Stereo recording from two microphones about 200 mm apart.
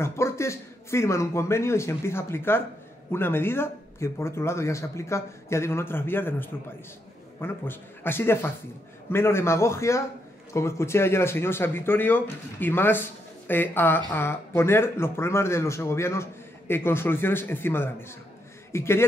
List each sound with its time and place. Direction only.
0.0 s speech: 15° left (ahead or behind)